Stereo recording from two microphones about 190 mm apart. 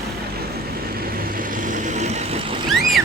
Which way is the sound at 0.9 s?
50° right (ahead or behind).